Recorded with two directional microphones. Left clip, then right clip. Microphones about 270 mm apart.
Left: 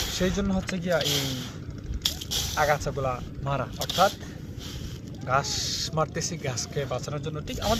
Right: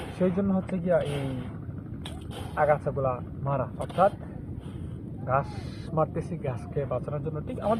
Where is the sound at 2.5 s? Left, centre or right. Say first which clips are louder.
Right 2 dB; left.